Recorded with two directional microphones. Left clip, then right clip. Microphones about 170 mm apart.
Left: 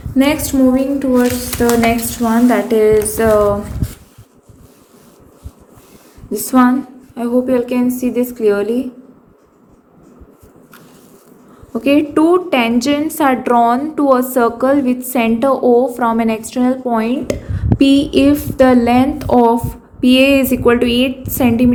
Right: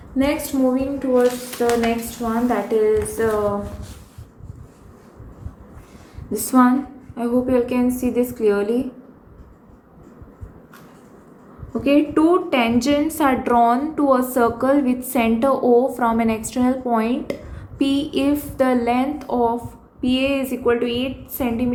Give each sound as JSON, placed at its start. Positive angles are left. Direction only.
{"t": 0.2, "sound": "a woman's voice", "side_deg": 40}
{"t": 6.3, "sound": "a woman's voice", "side_deg": 25}
{"t": 11.7, "sound": "a woman's voice", "side_deg": 35}